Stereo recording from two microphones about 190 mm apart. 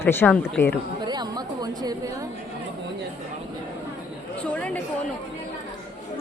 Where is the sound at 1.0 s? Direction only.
20° right (ahead or behind).